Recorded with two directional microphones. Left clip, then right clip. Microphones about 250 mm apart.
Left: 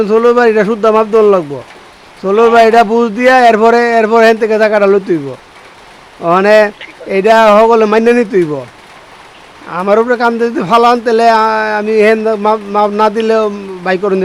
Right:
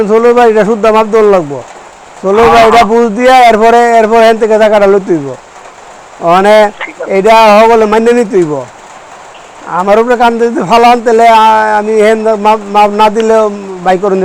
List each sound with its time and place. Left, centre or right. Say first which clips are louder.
0.0 s a man's voice: right 3 dB; centre
6.2 s a man's voice: right 3 dB; centre
9.6 s a man's voice: right 3 dB; centre